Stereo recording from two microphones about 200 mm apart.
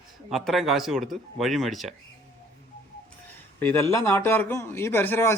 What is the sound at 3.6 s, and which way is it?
A man's voice, 10° left (ahead or behind).